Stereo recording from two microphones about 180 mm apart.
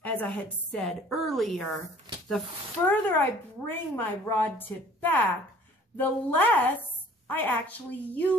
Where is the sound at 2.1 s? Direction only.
20° right (ahead or behind).